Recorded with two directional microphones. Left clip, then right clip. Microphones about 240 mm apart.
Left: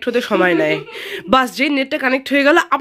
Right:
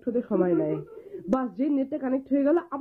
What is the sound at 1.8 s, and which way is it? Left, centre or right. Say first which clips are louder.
Speech: left 12 dB; centre.